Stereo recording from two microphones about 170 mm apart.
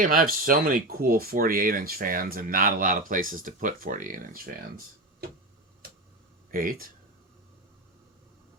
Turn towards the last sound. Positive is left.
turn(degrees=-55)  # may be behind; listen again after turning